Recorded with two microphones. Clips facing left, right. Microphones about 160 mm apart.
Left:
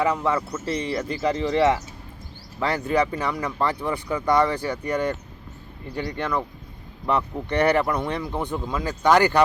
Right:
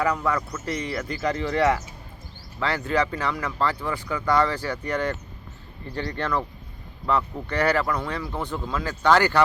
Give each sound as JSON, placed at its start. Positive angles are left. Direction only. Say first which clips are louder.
{"t": 0.0, "sound": "speech", "louder": "left 2 dB", "side_deg": 25}